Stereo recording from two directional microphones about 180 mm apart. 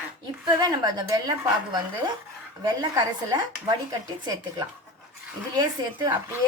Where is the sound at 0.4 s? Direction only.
20° right (ahead or behind).